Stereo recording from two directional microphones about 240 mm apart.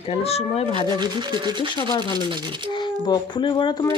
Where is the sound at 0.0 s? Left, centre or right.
Left.